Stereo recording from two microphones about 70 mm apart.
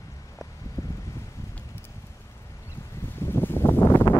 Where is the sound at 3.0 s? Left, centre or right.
Left.